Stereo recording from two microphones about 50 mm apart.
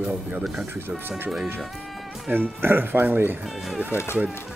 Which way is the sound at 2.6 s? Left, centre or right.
Right.